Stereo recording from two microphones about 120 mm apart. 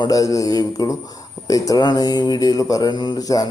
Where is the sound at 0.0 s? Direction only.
30° left (ahead or behind).